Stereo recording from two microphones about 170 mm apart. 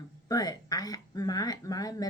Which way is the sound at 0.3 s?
20° left (ahead or behind).